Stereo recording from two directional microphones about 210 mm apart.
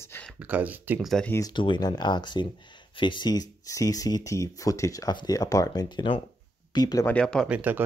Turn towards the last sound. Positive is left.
turn(degrees=-5)  # may be behind; listen again after turning